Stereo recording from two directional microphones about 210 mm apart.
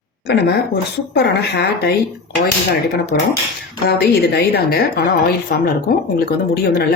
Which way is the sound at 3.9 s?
50° left (ahead or behind).